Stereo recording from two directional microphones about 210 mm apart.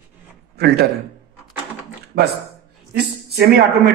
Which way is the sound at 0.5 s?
50° right (ahead or behind).